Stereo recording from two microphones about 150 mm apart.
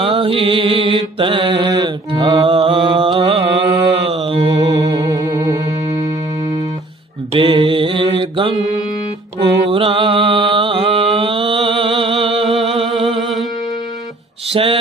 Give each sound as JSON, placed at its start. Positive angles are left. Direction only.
{"t": 0.0, "sound": "mantra", "side_deg": -35}
{"t": 4.7, "sound": "music", "side_deg": -25}
{"t": 7.3, "sound": "mantra", "side_deg": -35}
{"t": 9.6, "sound": "mantra", "side_deg": -35}
{"t": 13.1, "sound": "music", "side_deg": 0}
{"t": 14.5, "sound": "a sound", "side_deg": -40}